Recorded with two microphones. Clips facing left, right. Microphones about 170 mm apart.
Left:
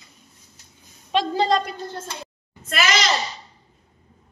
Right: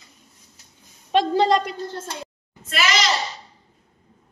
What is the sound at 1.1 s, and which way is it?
Speech, 65° right (ahead or behind).